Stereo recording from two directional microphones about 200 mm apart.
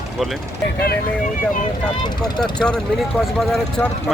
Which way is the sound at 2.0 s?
20° left (ahead or behind).